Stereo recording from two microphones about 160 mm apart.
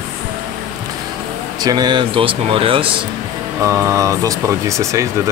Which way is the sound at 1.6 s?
25° right (ahead or behind).